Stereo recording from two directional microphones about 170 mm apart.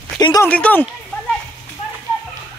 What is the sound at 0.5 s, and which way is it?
Speech, 10° left (ahead or behind).